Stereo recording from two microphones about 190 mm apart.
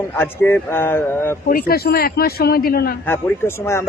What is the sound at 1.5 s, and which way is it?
Speech, 50° left (ahead or behind).